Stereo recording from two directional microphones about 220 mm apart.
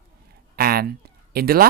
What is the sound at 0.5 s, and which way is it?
Speech, 45° right (ahead or behind).